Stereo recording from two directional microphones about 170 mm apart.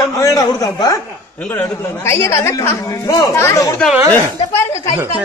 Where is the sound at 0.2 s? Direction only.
20° left (ahead or behind).